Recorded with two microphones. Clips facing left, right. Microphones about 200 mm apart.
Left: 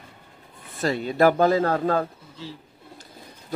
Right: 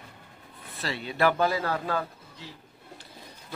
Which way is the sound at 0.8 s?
45° left (ahead or behind).